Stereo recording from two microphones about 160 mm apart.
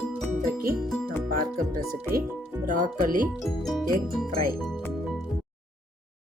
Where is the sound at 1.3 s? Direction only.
75° right (ahead or behind).